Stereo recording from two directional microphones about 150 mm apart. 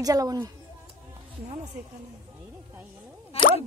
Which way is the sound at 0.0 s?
25° right (ahead or behind).